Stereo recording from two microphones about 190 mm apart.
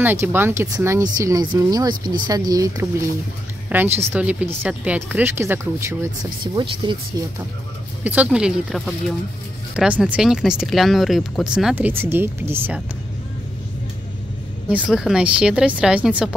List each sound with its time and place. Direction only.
0.0 s speech: 10° right (ahead or behind)
6.4 s speech: 25° right (ahead or behind)
8.0 s speech: 10° right (ahead or behind)
14.7 s speech: 5° right (ahead or behind)